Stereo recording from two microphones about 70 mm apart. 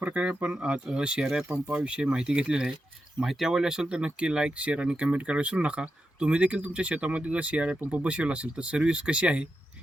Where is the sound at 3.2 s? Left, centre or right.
Centre.